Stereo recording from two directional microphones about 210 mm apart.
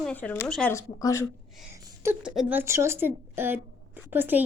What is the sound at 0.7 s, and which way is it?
Speech, 15° left (ahead or behind).